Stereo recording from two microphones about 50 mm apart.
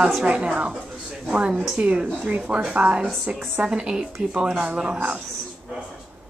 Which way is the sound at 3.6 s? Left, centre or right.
Centre.